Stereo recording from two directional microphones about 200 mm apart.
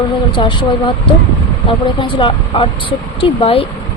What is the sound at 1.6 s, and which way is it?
Speech, 25° left (ahead or behind).